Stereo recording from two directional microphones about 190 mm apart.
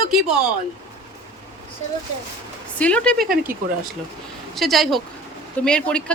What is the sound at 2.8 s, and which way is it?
Speech, 5° left (ahead or behind).